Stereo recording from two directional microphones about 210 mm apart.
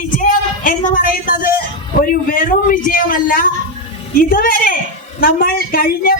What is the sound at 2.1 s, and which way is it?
A man's voice, 40° left (ahead or behind).